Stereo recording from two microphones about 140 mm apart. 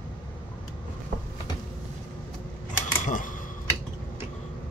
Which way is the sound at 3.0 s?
70° left (ahead or behind).